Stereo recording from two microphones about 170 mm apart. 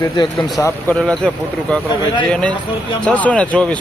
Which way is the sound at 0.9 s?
5° left (ahead or behind).